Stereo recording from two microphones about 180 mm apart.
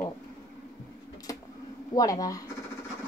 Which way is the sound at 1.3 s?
20° left (ahead or behind).